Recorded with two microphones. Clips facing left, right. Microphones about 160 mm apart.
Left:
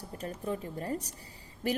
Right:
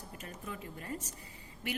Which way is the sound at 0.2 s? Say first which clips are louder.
Left 10 dB; 35° left (ahead or behind).